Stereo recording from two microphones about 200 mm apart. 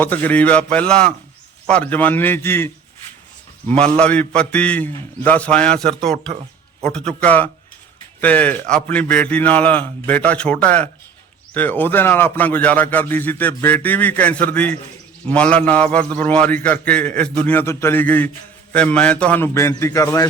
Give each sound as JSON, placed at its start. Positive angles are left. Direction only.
{"t": 0.0, "sound": "a man's voice", "side_deg": 10}
{"t": 3.8, "sound": "a man's voice", "side_deg": 5}